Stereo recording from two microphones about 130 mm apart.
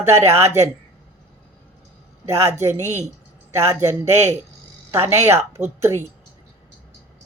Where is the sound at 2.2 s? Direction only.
20° right (ahead or behind).